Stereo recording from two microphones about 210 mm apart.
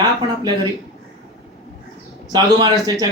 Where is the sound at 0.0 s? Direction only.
20° right (ahead or behind).